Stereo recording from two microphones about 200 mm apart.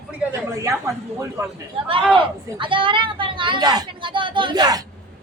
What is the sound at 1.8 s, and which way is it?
Speech, 25° right (ahead or behind).